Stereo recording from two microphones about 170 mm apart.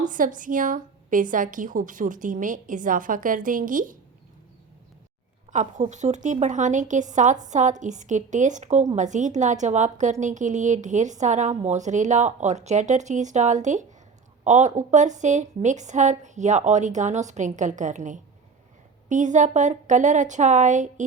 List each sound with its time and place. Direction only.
0.1 s a woman's voice: 50° right (ahead or behind)
5.5 s a woman's voice: 45° right (ahead or behind)